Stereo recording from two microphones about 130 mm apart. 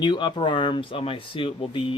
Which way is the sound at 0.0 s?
35° left (ahead or behind).